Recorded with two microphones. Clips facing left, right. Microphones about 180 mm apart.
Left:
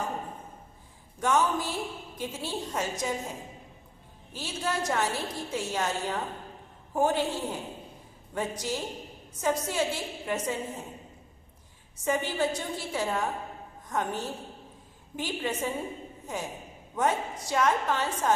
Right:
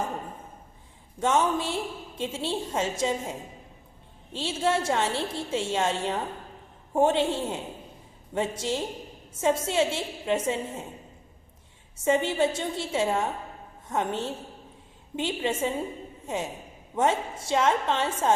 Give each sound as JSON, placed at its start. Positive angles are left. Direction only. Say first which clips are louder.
{"t": 1.2, "sound": "a woman's voice", "louder": "right 2 dB", "side_deg": -25}
{"t": 4.3, "sound": "a woman's voice", "louder": "right 6 dB", "side_deg": -25}
{"t": 12.0, "sound": "a woman's voice", "louder": "right 4 dB", "side_deg": -25}